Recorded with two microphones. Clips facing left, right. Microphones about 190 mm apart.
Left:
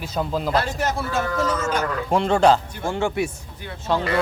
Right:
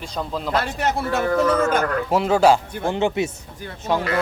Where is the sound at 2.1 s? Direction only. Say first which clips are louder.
Even; 5° right (ahead or behind).